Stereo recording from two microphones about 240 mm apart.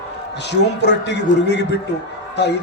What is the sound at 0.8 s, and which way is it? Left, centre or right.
Speech, left.